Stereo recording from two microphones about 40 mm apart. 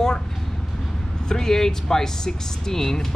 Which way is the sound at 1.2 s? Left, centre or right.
Centre.